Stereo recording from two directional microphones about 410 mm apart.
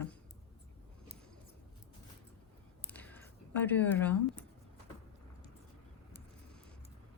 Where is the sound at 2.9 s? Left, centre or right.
Centre.